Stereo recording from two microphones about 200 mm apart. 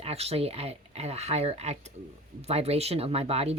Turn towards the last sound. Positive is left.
turn(degrees=-30)  # may be behind; listen again after turning